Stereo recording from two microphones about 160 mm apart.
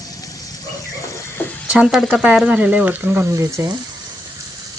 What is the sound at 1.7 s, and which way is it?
Speech, centre (ahead or behind).